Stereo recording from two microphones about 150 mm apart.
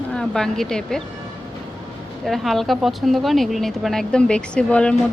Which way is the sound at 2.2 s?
Centre (ahead or behind).